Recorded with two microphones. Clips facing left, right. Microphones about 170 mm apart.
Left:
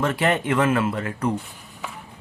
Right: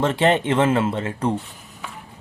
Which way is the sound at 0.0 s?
25° right (ahead or behind).